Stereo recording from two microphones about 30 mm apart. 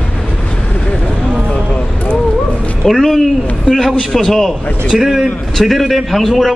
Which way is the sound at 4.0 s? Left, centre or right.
Centre.